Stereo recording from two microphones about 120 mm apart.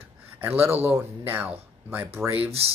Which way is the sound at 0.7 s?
20° right (ahead or behind).